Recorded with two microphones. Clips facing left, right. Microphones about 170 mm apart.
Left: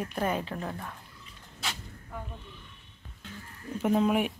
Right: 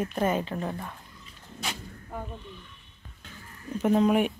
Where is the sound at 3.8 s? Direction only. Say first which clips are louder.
Right 3 dB; 5° left (ahead or behind).